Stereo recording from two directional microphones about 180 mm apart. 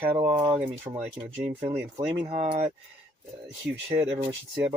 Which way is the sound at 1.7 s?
15° right (ahead or behind).